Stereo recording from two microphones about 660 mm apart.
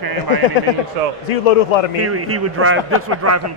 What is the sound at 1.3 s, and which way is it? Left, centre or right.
Speech, left.